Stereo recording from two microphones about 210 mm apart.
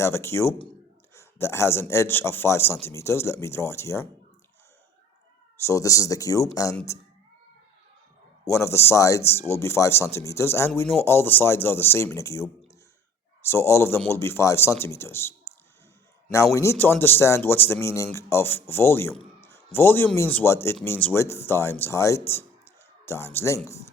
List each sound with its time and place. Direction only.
0.0 s a man's voice: 10° left (ahead or behind)
5.6 s a man's voice: 15° left (ahead or behind)
8.4 s a man's voice: 15° left (ahead or behind)
13.5 s a man's voice: 10° left (ahead or behind)